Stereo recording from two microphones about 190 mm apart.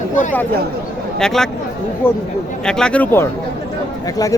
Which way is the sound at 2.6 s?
5° left (ahead or behind).